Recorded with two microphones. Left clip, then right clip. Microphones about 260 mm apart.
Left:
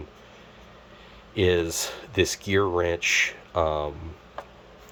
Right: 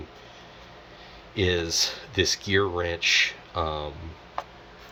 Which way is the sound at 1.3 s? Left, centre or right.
Centre.